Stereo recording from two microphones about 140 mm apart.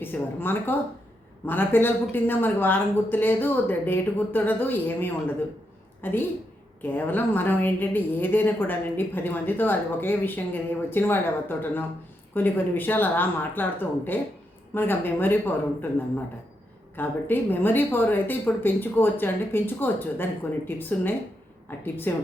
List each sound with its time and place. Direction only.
0.0 s a woman's voice: 15° left (ahead or behind)